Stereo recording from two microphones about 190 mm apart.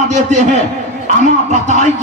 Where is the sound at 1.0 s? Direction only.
40° right (ahead or behind).